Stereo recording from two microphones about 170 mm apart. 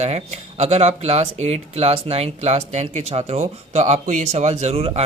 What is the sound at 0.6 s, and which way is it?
Speech, 40° right (ahead or behind).